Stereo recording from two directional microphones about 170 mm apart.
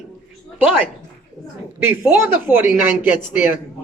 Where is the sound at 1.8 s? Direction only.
15° right (ahead or behind).